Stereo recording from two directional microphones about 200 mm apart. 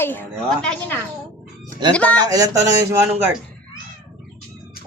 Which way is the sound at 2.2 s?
15° right (ahead or behind).